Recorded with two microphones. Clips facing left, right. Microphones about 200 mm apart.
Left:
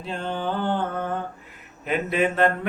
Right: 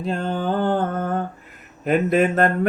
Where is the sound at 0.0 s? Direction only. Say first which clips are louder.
Right 4 dB; 45° right (ahead or behind).